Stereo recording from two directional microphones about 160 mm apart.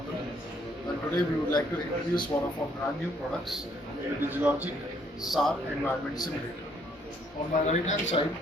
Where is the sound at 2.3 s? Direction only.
25° left (ahead or behind).